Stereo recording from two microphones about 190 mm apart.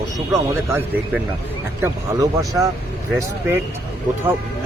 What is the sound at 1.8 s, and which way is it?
Speech, 15° right (ahead or behind).